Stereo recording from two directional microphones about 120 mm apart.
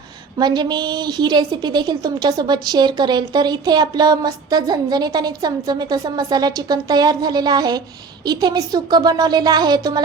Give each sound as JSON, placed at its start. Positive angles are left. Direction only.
{"t": 0.3, "sound": "a woman's voice", "side_deg": -35}